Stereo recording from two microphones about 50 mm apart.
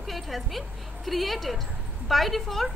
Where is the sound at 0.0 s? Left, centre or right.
Centre.